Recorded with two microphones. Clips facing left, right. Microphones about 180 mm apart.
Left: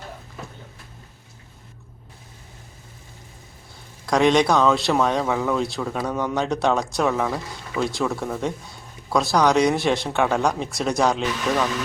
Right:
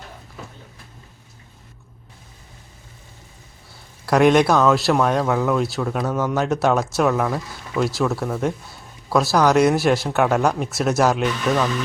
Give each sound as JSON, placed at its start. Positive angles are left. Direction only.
{"t": 4.0, "sound": "speech", "side_deg": -5}